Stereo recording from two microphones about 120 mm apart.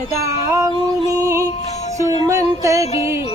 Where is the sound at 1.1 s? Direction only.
25° right (ahead or behind).